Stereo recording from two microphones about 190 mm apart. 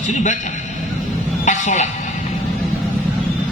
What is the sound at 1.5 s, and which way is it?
Speech, 40° left (ahead or behind).